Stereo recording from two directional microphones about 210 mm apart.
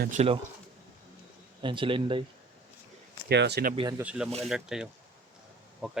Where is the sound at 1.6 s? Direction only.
25° right (ahead or behind).